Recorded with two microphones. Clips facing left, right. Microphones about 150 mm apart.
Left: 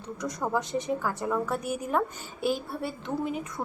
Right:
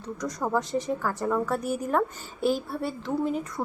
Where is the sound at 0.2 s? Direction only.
Centre (ahead or behind).